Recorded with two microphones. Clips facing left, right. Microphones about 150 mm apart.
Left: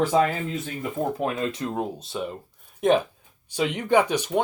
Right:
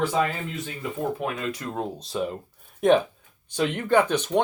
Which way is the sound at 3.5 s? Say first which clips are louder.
Even; 10° left (ahead or behind).